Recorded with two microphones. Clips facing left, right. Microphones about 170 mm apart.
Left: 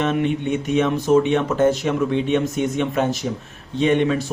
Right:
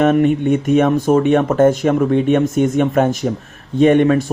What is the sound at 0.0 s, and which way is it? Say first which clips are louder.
Speech: right 7 dB; 50° right (ahead or behind).